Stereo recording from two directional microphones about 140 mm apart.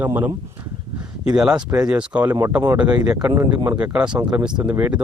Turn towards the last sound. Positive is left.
turn(degrees=-10)  # may be behind; listen again after turning